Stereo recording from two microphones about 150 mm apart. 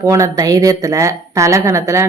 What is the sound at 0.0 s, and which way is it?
A woman's voice, 20° right (ahead or behind).